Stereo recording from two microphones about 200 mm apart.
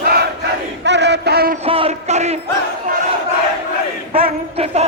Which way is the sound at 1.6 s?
30° right (ahead or behind).